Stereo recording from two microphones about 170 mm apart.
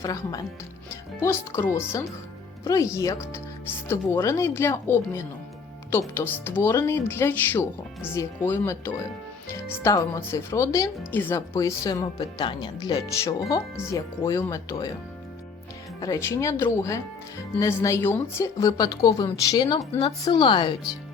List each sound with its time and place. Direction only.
0.0 s speech: 20° left (ahead or behind)
16.0 s speech: 20° left (ahead or behind)